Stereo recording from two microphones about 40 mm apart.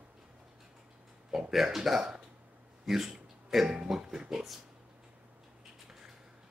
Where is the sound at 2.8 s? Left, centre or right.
Centre.